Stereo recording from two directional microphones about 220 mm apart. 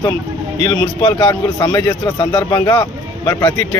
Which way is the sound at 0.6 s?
20° left (ahead or behind).